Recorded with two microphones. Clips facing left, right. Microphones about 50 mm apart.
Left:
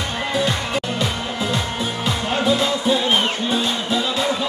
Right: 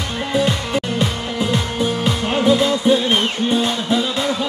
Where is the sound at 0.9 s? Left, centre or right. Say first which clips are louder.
Right 2 dB; centre.